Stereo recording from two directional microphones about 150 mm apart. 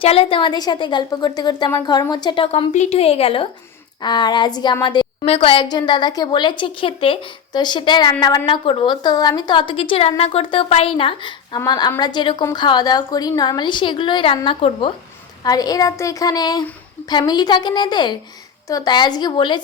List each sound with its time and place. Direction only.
0.0 s a woman's voice: 40° left (ahead or behind)
15.4 s a woman's voice: 25° left (ahead or behind)